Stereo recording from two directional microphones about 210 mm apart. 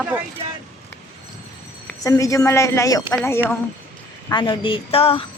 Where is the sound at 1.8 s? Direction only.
15° left (ahead or behind).